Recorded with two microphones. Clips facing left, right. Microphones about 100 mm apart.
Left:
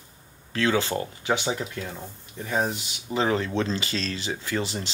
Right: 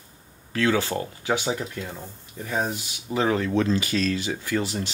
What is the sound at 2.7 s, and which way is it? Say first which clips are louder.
Speech: right 1 dB; 25° left (ahead or behind).